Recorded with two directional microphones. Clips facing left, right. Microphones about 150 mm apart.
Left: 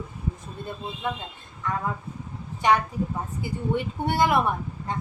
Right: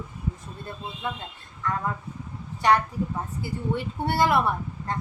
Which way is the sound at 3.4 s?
15° left (ahead or behind).